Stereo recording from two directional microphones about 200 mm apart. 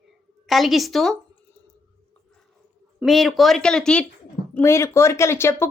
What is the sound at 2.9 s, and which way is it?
A woman's voice, centre (ahead or behind).